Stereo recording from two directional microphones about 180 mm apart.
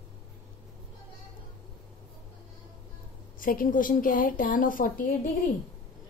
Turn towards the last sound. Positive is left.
turn(degrees=50)  # may be behind; listen again after turning